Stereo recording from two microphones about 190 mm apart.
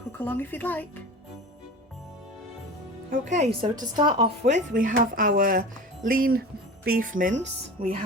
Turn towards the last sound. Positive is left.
turn(degrees=-30)  # may be behind; listen again after turning